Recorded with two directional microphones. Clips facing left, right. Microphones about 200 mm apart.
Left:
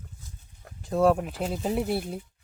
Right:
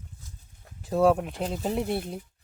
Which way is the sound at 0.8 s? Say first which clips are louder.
Even; centre (ahead or behind).